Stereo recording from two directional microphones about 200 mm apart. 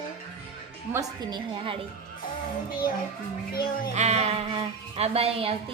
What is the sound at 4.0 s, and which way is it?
A woman's voice, 35° right (ahead or behind).